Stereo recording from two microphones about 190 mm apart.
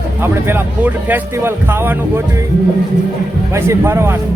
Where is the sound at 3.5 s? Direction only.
15° right (ahead or behind).